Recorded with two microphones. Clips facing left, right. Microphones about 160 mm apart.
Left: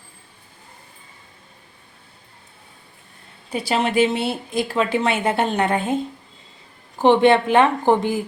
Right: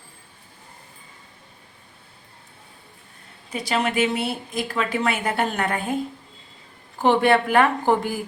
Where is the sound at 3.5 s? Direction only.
30° left (ahead or behind).